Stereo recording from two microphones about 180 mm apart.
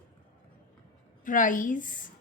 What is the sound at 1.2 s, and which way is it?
Speech, 50° left (ahead or behind).